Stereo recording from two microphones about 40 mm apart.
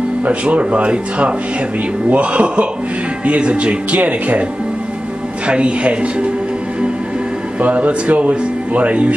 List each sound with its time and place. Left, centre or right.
0.3 s speech: right
5.5 s speech: right
7.6 s speech: right